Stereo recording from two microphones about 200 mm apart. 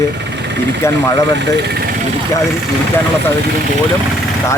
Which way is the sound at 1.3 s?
55° right (ahead or behind).